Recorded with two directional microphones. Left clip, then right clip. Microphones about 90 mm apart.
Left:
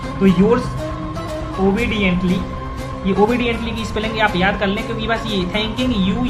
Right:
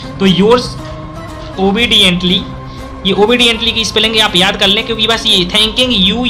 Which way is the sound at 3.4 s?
90° right.